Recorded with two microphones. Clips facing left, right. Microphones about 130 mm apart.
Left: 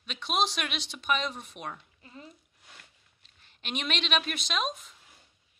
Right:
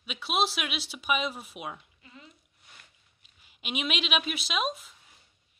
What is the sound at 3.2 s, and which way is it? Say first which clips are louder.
Speech: right 2 dB; 10° right (ahead or behind).